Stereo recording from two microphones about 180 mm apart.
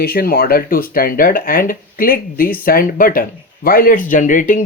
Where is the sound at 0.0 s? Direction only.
55° left (ahead or behind).